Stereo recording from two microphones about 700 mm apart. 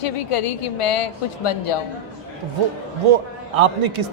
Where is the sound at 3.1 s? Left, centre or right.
Right.